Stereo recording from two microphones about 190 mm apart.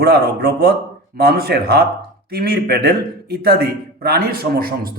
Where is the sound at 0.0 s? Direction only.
55° right (ahead or behind).